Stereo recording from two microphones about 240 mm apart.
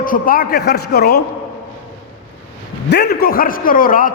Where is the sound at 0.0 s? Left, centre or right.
Left.